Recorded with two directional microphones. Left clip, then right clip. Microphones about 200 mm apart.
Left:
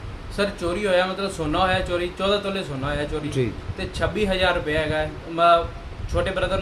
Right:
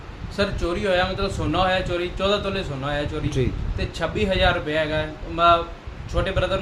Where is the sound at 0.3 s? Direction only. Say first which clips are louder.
Even; 5° left (ahead or behind).